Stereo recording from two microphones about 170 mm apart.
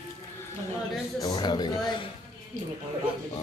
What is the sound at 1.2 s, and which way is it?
Speech, 25° left (ahead or behind).